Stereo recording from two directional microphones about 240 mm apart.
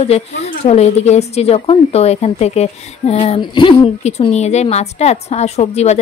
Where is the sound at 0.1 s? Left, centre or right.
Left.